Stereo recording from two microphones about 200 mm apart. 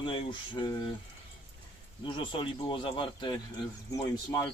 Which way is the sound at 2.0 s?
25° left (ahead or behind).